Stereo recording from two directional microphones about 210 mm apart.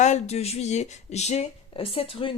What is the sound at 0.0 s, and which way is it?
Speech, 30° left (ahead or behind).